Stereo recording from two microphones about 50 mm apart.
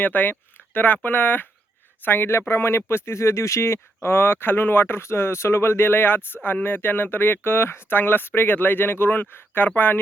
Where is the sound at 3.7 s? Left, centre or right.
Left.